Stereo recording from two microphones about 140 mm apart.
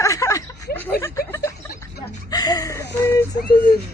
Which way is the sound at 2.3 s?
30° left (ahead or behind).